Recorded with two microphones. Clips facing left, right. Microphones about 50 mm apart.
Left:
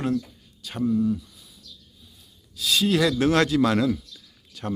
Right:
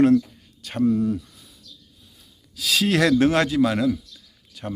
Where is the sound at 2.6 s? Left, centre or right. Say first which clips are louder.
Right 1 dB; right.